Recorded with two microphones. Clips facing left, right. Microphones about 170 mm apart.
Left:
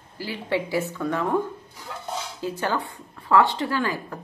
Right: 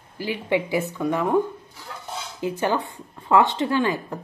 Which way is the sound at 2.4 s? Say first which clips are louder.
Right 4 dB; 20° right (ahead or behind).